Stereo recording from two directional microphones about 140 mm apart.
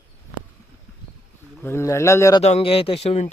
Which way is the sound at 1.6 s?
20° left (ahead or behind).